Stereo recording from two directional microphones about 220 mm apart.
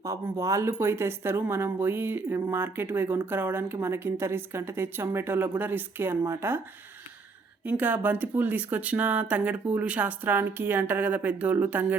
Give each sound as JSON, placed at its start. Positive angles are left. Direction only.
{"t": 0.0, "sound": "speech", "side_deg": -15}
{"t": 7.6, "sound": "speech", "side_deg": -5}